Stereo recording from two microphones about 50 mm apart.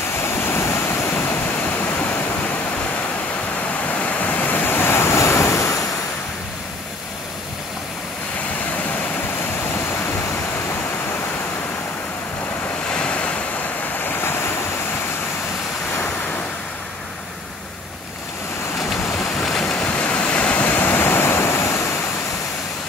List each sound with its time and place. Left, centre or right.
0.2 s waves: left
0.7 s waves: left
1.2 s waterfall: left
3.8 s waves: left
8.7 s vehicle: left
12.8 s waves: centre
14.0 s waves: left
15.9 s waves: left
19.1 s vehicle: centre
20.0 s vehicle: left
21.2 s waves: left